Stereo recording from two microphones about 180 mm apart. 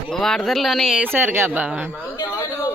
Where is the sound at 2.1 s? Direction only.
15° left (ahead or behind).